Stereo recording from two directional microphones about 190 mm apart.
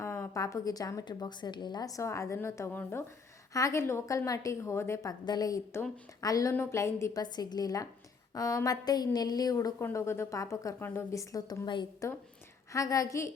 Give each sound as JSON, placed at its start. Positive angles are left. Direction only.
{"t": 0.0, "sound": "a woman's voice", "side_deg": 15}